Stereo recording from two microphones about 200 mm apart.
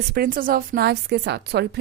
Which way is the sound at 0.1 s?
45° right (ahead or behind).